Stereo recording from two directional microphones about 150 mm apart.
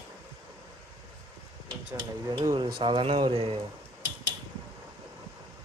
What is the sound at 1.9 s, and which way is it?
Speech, 25° right (ahead or behind).